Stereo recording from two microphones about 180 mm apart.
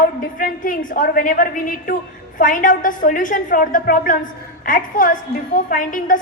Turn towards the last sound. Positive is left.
turn(degrees=50)  # may be behind; listen again after turning